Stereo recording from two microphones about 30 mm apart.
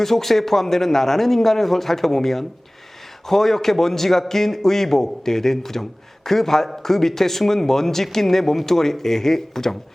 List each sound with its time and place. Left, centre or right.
0.0 s a man's voice: centre